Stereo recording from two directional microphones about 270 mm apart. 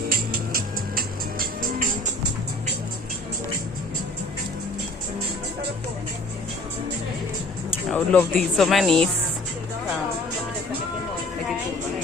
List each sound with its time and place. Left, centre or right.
0.1 s music: right
7.9 s speech: centre